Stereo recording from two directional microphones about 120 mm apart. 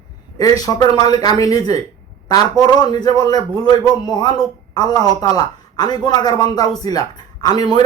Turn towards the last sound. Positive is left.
turn(degrees=35)  # may be behind; listen again after turning